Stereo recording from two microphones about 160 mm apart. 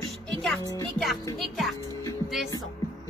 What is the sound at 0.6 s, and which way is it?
Speech, 20° left (ahead or behind).